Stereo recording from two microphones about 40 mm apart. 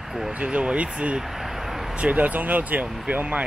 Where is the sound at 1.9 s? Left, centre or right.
Right.